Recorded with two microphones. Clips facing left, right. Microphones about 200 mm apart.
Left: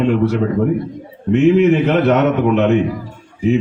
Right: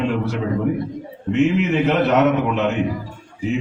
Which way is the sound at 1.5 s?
55° left (ahead or behind).